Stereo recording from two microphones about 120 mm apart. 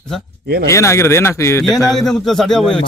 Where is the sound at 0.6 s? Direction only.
25° left (ahead or behind).